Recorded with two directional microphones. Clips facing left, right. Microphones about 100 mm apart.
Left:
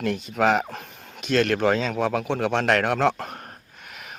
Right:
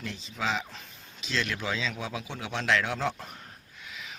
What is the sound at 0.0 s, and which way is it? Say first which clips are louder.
Speech: left 12 dB; 55° left (ahead or behind).